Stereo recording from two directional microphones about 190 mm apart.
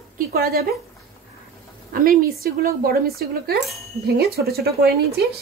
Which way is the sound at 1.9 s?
50° right (ahead or behind).